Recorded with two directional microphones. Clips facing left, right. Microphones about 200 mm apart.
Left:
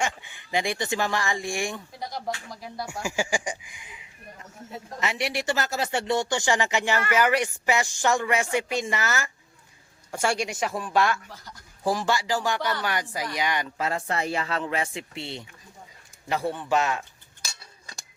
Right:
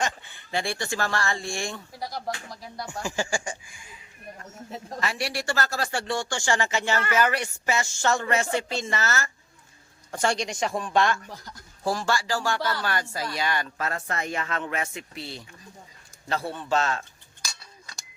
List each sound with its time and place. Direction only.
0.0 s speech: 15° left (ahead or behind)
2.2 s speech: centre (ahead or behind)
11.9 s speech: 20° left (ahead or behind)
16.3 s speech: 15° left (ahead or behind)